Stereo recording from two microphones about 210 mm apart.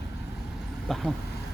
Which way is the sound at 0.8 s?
Centre (ahead or behind).